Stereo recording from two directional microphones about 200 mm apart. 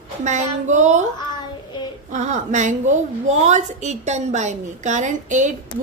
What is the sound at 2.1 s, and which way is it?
A woman's voice, 35° right (ahead or behind).